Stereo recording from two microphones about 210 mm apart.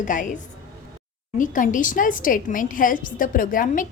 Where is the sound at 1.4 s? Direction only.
40° left (ahead or behind).